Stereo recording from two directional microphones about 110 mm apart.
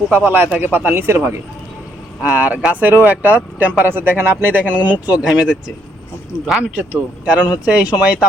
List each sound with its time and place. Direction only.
0.1 s speech: 15° right (ahead or behind)